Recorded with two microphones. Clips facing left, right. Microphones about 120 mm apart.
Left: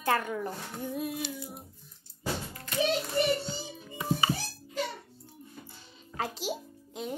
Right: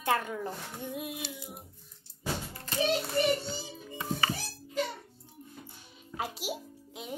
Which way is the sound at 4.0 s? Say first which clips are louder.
Left 3 dB; 20° left (ahead or behind).